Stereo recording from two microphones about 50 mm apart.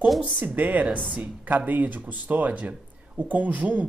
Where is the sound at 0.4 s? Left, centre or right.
Right.